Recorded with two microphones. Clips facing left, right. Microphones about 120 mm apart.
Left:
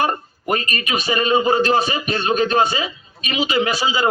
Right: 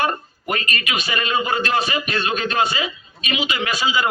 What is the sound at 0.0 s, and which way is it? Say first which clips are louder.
A man's voice: left 2 dB; 35° left (ahead or behind).